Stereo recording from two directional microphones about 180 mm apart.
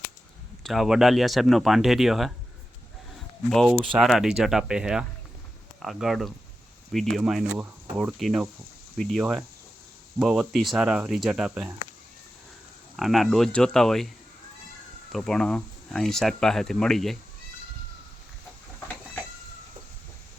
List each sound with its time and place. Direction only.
0.6 s speech: centre (ahead or behind)
3.5 s speech: centre (ahead or behind)
13.0 s speech: centre (ahead or behind)
15.1 s speech: 5° left (ahead or behind)